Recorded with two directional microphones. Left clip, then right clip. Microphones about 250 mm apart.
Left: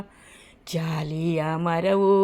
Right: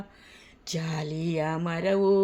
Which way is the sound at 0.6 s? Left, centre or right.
Centre.